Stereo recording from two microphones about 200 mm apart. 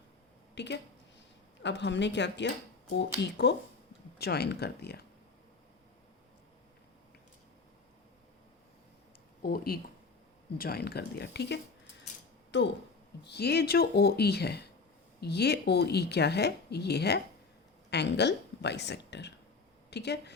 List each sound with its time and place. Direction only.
0.5 s speech: 60° left (ahead or behind)
9.4 s a woman's voice: 45° left (ahead or behind)